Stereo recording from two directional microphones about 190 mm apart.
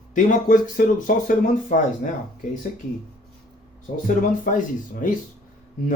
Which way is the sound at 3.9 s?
45° left (ahead or behind).